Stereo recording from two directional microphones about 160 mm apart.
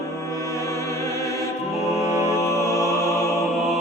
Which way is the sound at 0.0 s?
20° left (ahead or behind).